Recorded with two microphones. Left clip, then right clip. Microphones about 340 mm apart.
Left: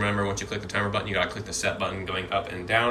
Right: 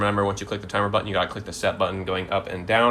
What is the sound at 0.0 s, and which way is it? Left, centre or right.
Speech, centre.